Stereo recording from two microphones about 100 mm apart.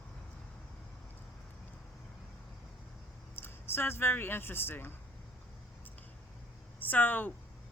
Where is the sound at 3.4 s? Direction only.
25° left (ahead or behind).